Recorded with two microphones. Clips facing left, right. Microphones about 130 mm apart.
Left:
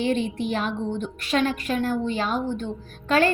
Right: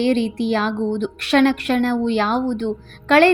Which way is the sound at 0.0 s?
90° right.